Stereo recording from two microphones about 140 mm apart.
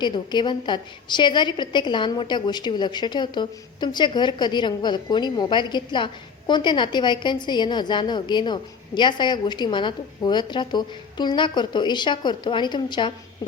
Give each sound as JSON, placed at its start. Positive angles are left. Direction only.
{"t": 0.0, "sound": "a woman's voice", "side_deg": 30}